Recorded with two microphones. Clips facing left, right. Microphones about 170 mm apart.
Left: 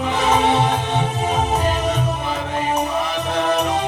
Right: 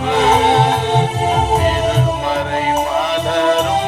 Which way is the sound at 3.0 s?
70° right (ahead or behind).